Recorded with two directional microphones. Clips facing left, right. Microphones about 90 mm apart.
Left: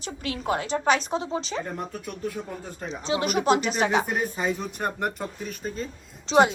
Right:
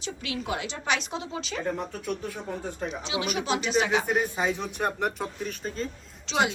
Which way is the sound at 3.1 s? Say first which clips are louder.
Left 7 dB; 45° left (ahead or behind).